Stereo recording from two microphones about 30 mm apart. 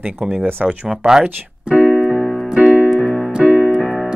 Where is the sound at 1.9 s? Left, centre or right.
Centre.